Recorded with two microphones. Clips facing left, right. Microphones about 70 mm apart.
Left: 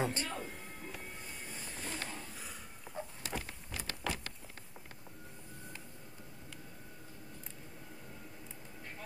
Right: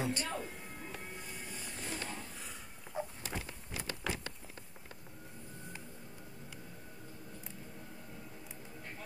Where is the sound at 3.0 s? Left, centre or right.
Centre.